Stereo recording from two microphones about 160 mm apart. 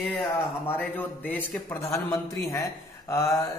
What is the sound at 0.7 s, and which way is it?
A man's voice, 10° left (ahead or behind).